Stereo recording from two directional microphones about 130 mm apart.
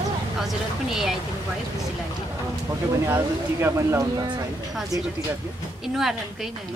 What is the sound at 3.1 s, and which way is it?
Speech, 20° right (ahead or behind).